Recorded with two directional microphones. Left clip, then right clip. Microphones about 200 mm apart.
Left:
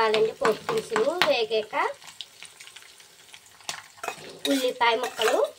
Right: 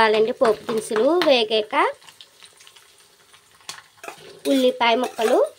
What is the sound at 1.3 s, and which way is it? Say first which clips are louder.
Speech: right 6 dB; 60° right (ahead or behind).